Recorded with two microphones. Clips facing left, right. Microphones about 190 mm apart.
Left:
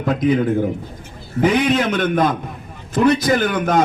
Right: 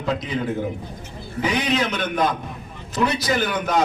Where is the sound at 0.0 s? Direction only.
50° left (ahead or behind).